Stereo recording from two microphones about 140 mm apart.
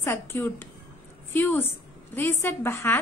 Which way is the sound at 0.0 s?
15° left (ahead or behind).